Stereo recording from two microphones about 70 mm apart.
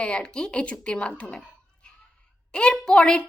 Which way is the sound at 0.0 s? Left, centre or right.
Centre.